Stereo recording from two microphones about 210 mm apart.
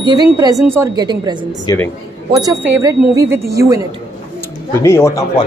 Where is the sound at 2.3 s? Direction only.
15° right (ahead or behind).